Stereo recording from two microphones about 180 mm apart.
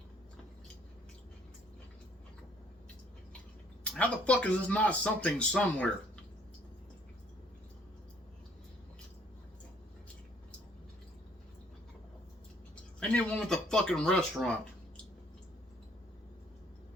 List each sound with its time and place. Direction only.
3.8 s speech: 5° left (ahead or behind)
13.0 s speech: 5° left (ahead or behind)